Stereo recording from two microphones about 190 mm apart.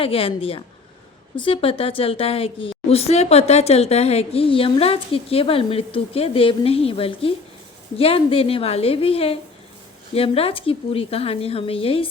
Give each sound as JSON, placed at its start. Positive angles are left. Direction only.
{"t": 0.0, "sound": "a woman's voice", "side_deg": 30}